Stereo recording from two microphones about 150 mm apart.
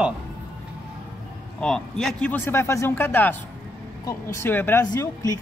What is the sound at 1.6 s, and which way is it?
Speech, 5° left (ahead or behind).